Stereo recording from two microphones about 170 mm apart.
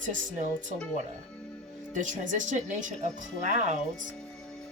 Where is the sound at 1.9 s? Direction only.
50° right (ahead or behind).